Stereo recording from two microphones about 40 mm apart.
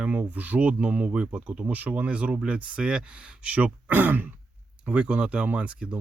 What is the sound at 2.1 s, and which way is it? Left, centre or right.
Speech, right.